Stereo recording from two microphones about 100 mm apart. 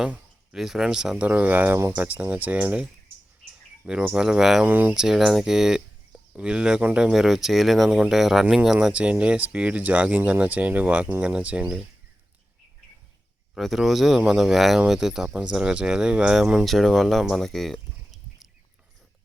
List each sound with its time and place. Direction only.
0.0 s speech: 5° right (ahead or behind)
3.8 s speech: 10° right (ahead or behind)
4.6 s speech: 15° right (ahead or behind)
4.9 s speech: 5° right (ahead or behind)
13.5 s speech: centre (ahead or behind)